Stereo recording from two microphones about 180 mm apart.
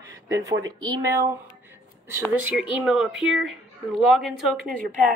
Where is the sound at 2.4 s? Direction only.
5° right (ahead or behind).